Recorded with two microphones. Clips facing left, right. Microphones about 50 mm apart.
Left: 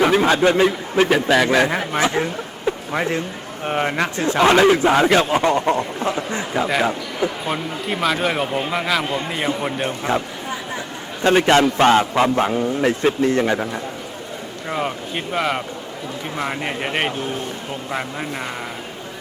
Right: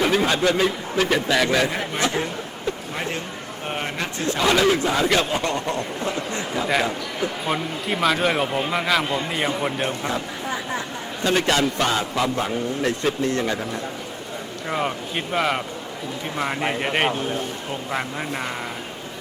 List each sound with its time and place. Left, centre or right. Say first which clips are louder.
0.1 s a man's voice: left 4 dB; centre
2.9 s a man's voice: left 6 dB; left
4.2 s a man's voice: left 5 dB; left
7.4 s speech: left 1 dB; centre
11.2 s a man's voice: left 6 dB; left
12.5 s a man's voice: left 5 dB; left
14.7 s speech: left 1 dB; centre